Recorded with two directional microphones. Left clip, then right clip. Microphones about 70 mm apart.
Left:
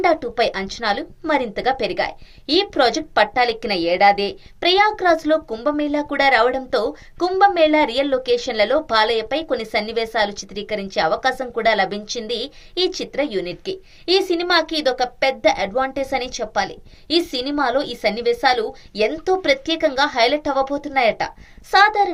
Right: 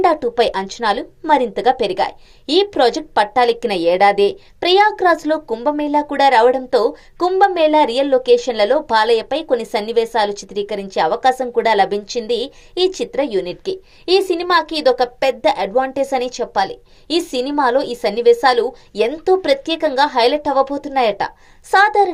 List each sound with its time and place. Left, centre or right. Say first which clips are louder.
0.0 s speech: right 3 dB; right